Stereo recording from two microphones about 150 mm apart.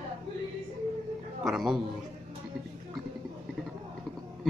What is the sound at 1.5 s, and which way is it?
Speech, centre (ahead or behind).